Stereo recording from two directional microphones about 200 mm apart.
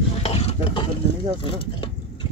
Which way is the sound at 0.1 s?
30° left (ahead or behind).